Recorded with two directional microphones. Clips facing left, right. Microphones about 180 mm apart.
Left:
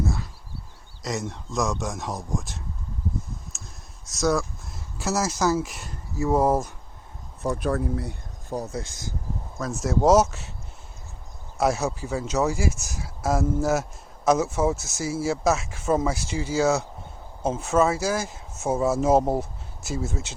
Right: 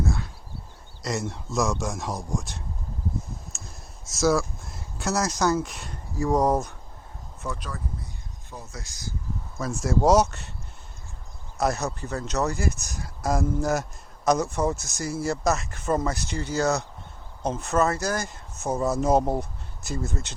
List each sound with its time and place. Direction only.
0.0 s a sound: centre (ahead or behind)
1.0 s speech: centre (ahead or behind)
3.5 s a sound: centre (ahead or behind)
4.0 s speech: centre (ahead or behind)
7.4 s speech: 45° left (ahead or behind)
7.7 s speech: 70° left (ahead or behind)
8.7 s speech: 30° left (ahead or behind)
9.6 s speech: centre (ahead or behind)
11.5 s speech: 5° left (ahead or behind)